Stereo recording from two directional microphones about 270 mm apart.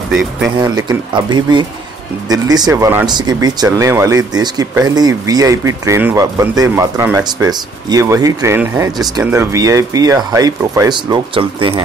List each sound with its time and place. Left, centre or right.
0.1 s speech: centre
0.6 s speech: centre